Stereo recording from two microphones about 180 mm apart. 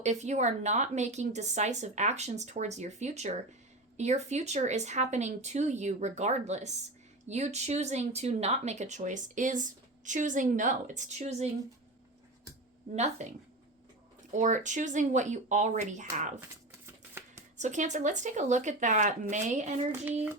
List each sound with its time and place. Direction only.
0.0 s speech: 40° right (ahead or behind)
14.3 s speech: 45° right (ahead or behind)
16.8 s a sound: 15° right (ahead or behind)
17.6 s speech: 40° right (ahead or behind)